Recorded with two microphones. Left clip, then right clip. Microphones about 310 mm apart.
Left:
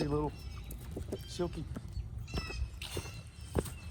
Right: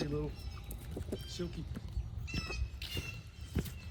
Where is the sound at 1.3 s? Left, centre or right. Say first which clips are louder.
Left 5 dB; centre.